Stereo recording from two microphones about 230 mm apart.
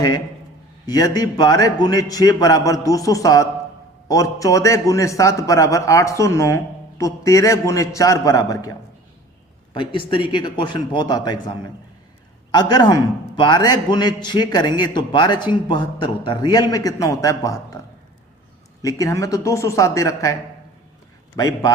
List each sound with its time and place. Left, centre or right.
0.9 s a man's voice: centre
9.7 s a man's voice: left
18.8 s a man's voice: centre
21.3 s a man's voice: centre